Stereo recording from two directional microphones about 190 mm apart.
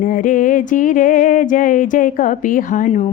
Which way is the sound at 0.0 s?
45° left (ahead or behind).